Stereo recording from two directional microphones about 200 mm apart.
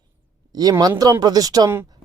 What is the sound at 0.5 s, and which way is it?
Speech, 20° right (ahead or behind).